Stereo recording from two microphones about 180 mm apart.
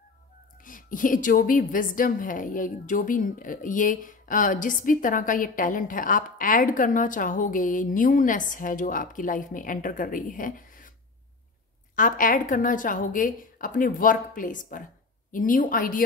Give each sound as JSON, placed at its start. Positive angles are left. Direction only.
{"t": 0.7, "sound": "a woman's voice", "side_deg": 50}
{"t": 11.9, "sound": "a woman's voice", "side_deg": 50}